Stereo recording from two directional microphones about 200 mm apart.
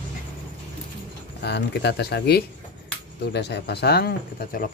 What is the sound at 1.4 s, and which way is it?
Speech, 60° left (ahead or behind).